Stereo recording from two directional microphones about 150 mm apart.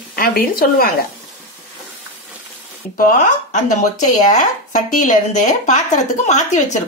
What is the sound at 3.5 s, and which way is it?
Speech, 55° left (ahead or behind).